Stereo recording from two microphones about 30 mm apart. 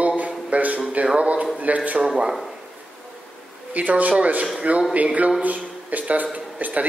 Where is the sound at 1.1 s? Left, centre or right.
Right.